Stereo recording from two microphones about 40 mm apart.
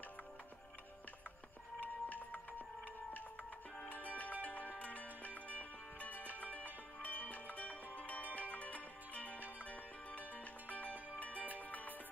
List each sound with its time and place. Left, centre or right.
1.8 s music: left
3.8 s music: left
7.0 s wind chime: left
8.4 s music: left